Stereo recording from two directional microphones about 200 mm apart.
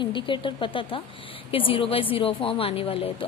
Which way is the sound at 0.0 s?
25° left (ahead or behind).